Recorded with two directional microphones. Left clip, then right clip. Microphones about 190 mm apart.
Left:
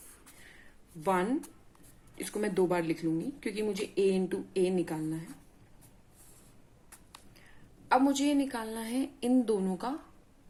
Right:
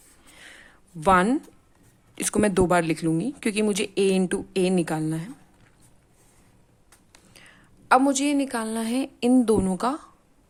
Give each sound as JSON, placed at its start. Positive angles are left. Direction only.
{"t": 1.0, "sound": "speech", "side_deg": -45}
{"t": 7.9, "sound": "a woman's voice", "side_deg": -45}